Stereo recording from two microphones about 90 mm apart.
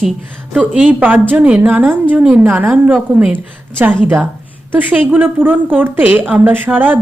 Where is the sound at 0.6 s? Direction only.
20° right (ahead or behind).